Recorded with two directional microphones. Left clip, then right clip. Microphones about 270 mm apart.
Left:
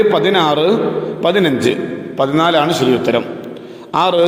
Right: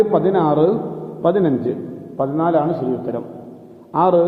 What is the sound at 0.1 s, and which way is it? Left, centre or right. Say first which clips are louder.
A man's voice: left 3 dB; left.